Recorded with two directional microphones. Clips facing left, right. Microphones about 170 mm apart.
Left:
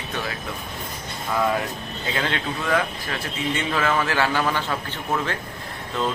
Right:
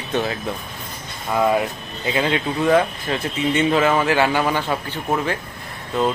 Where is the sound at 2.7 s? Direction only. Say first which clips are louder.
Right 7 dB; 25° right (ahead or behind).